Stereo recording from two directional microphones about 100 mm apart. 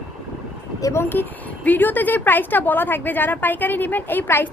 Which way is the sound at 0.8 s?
35° left (ahead or behind).